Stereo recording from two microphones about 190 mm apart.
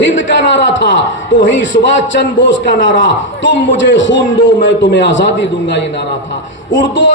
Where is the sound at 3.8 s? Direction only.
75° left (ahead or behind).